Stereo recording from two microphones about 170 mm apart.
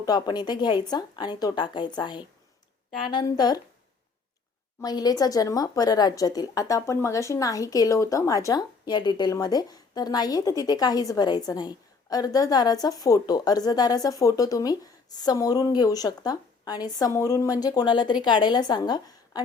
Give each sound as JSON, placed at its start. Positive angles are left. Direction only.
{"t": 0.0, "sound": "a woman's voice", "side_deg": 25}
{"t": 4.8, "sound": "a woman's voice", "side_deg": 25}